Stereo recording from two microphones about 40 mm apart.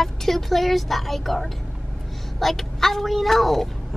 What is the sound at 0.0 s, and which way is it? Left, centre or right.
Speech, centre.